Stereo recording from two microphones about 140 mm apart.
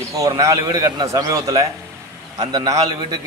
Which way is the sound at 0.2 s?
25° right (ahead or behind).